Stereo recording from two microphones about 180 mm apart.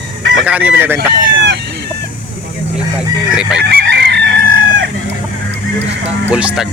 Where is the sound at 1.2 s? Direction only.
65° right (ahead or behind).